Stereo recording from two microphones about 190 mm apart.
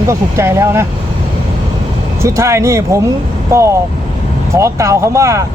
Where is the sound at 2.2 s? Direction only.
15° right (ahead or behind).